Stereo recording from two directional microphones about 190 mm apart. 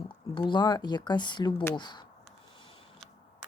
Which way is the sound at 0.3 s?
25° left (ahead or behind).